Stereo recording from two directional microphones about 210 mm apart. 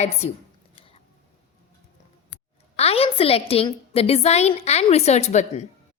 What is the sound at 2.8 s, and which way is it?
A woman's voice, 30° left (ahead or behind).